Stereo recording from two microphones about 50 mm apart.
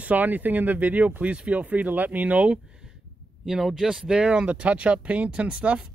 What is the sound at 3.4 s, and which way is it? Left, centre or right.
Speech, centre.